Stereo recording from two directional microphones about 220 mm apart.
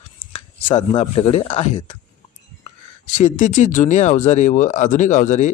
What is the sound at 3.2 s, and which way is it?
Speech, 35° left (ahead or behind).